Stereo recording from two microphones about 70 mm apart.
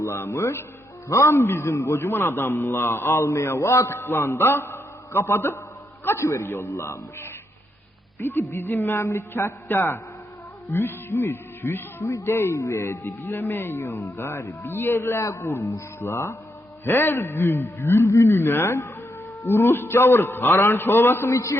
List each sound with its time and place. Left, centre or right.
0.0 s a man's voice: left